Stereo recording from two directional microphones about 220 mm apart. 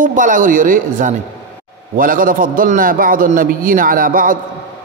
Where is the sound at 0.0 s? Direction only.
35° right (ahead or behind).